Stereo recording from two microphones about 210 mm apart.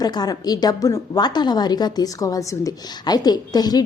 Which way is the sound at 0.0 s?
20° left (ahead or behind).